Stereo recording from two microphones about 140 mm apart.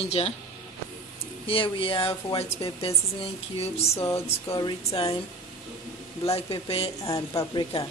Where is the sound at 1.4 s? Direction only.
40° left (ahead or behind).